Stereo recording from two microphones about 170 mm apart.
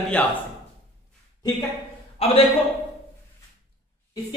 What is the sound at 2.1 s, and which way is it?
Speech, 35° left (ahead or behind).